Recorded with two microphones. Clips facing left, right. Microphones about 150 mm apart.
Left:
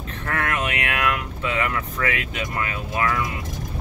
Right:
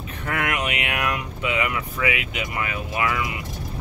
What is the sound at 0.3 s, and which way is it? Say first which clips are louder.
Speech: even; 15° right (ahead or behind).